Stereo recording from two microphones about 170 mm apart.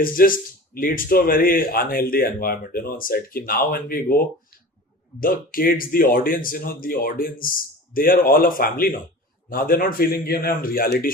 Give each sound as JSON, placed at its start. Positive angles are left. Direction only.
{"t": 0.0, "sound": "speech", "side_deg": 55}